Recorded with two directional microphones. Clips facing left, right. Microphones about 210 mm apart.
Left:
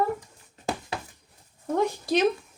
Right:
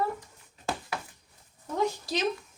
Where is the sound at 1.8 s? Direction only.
60° left (ahead or behind).